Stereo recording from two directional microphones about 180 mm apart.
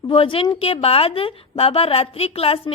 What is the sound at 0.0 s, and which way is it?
A woman's voice, 30° left (ahead or behind).